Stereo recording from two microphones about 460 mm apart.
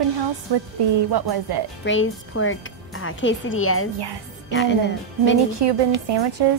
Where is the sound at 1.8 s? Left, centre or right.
Left.